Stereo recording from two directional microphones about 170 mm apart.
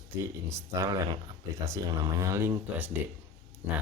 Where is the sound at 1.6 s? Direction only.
15° right (ahead or behind).